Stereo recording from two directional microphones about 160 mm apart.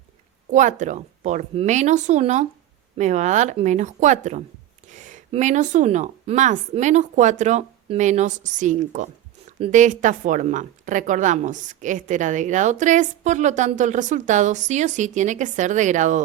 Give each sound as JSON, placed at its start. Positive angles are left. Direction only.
{"t": 0.5, "sound": "a woman's voice", "side_deg": -50}